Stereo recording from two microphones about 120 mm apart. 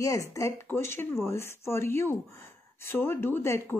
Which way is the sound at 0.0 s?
25° left (ahead or behind).